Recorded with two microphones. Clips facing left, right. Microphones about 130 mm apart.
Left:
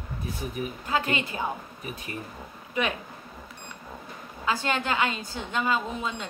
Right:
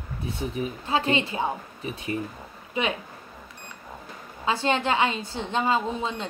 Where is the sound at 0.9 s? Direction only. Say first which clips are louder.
Right 3 dB; 25° right (ahead or behind).